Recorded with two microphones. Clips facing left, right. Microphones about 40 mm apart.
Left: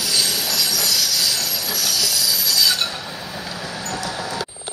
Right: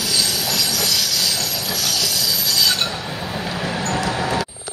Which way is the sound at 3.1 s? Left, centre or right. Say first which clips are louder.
Right 5 dB; right.